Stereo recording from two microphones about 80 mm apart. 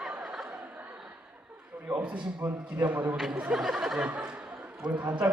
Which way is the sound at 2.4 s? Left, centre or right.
Right.